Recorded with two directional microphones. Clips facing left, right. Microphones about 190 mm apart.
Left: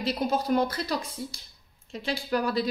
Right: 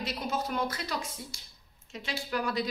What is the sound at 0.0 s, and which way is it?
Speech, 35° left (ahead or behind).